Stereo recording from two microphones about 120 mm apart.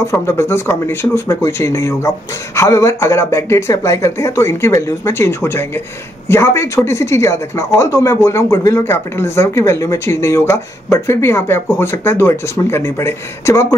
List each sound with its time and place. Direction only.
0.0 s speech: 20° left (ahead or behind)